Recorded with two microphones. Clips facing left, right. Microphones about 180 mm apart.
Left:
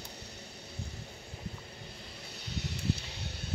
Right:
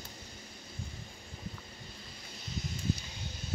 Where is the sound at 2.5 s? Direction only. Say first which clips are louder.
Left 1 dB; 70° left (ahead or behind).